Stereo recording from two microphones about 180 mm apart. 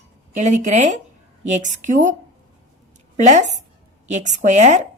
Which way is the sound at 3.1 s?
40° right (ahead or behind).